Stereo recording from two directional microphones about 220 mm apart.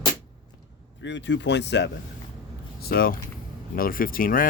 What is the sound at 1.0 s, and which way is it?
Speech, 55° left (ahead or behind).